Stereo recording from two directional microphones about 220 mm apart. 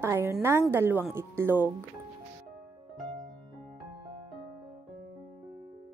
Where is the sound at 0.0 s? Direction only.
10° right (ahead or behind).